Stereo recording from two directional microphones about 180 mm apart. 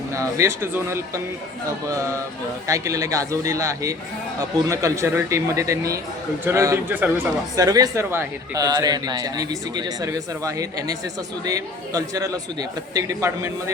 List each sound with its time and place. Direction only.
0.1 s a man's voice: 15° right (ahead or behind)
2.6 s a man's voice: 15° right (ahead or behind)